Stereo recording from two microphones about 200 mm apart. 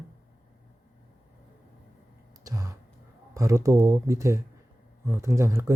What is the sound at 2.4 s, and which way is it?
Speech, 15° right (ahead or behind).